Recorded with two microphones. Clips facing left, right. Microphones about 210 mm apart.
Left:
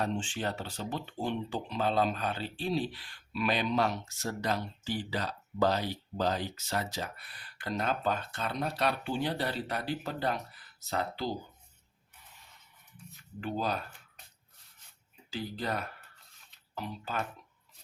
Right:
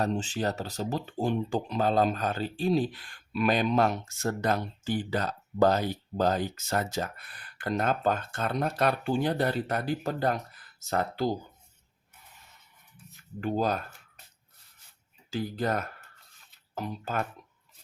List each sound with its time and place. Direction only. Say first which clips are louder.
0.0 s speech: right 4 dB; 40° right (ahead or behind)
13.4 s speech: right 5 dB; 45° right (ahead or behind)
15.3 s speech: right 6 dB; 45° right (ahead or behind)